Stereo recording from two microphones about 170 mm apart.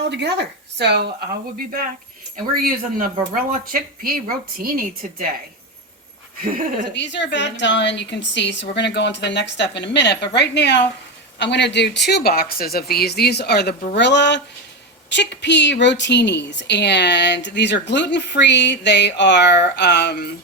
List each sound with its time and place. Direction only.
0.1 s speech: 85° right
2.3 s speech: 55° right (ahead or behind)
6.4 s speech: 55° right (ahead or behind)
6.9 s a woman's voice: 90° left; by 13.7 s 75° left (ahead or behind)
13.9 s a woman's voice: 90° left; by 20.3 s 75° left (ahead or behind)